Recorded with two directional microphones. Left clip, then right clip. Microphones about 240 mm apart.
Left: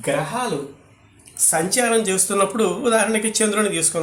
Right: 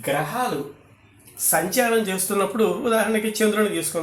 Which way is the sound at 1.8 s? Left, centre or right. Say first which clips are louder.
Left 3 dB; centre.